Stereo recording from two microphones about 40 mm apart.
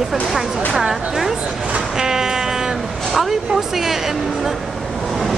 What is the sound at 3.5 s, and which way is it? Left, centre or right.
Speech, centre.